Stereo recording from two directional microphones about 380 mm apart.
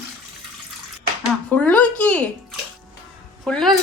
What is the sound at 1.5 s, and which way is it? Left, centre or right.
Speech, centre.